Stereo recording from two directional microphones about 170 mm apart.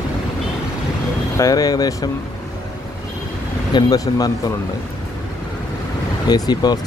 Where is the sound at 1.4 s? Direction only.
20° left (ahead or behind).